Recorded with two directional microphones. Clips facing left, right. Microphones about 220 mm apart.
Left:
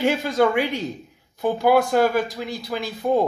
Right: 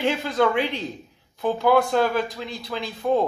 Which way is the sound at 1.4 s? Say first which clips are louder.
Left 1 dB; 10° left (ahead or behind).